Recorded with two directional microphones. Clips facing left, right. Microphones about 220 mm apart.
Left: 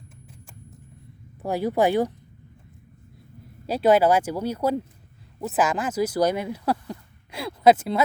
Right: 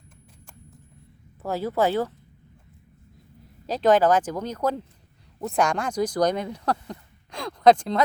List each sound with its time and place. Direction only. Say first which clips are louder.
1.4 s speech: left 2 dB; 15° left (ahead or behind)
3.7 s speech: left 1 dB; 10° left (ahead or behind)